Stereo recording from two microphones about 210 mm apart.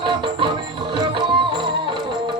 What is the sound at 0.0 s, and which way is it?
Music, 25° right (ahead or behind).